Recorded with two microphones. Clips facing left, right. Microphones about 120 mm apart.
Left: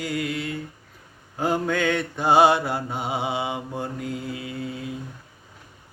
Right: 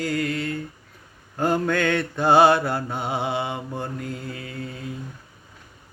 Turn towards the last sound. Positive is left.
turn(degrees=15)  # may be behind; listen again after turning